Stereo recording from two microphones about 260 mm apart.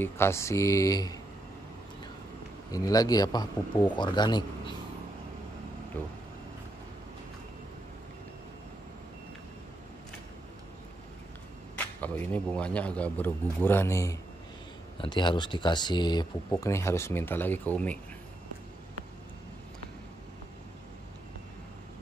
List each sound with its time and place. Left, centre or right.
0.0 s speech: centre
2.7 s speech: centre
11.7 s a man's voice: centre